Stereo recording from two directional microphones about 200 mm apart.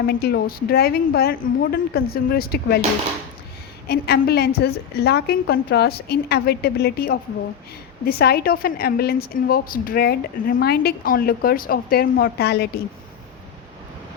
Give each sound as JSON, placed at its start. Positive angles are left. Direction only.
{"t": 0.1, "sound": "a woman's voice", "side_deg": 55}
{"t": 3.8, "sound": "a woman's voice", "side_deg": 50}